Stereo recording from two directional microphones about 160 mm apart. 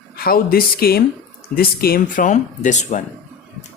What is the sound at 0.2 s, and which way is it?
Speech, 70° left (ahead or behind).